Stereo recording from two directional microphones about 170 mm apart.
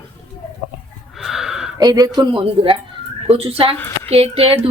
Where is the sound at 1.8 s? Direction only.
20° right (ahead or behind).